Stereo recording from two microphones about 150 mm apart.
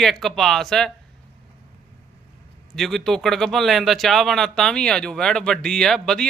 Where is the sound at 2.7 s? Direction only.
Centre (ahead or behind).